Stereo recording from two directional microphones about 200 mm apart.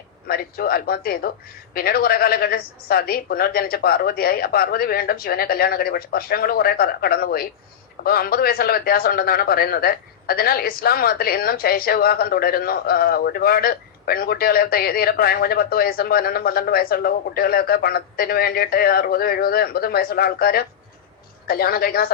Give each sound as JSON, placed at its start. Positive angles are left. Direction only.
{"t": 0.3, "sound": "a man's voice", "side_deg": 50}